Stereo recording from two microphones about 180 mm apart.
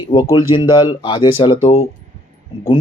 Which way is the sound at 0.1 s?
25° left (ahead or behind).